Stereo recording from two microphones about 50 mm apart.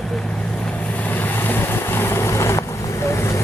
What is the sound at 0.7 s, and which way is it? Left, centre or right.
Vehicle, left.